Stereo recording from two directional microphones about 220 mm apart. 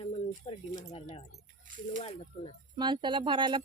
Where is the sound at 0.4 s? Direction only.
30° left (ahead or behind).